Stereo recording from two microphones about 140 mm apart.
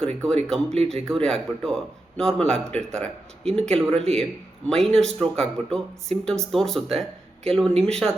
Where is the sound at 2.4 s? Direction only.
50° right (ahead or behind).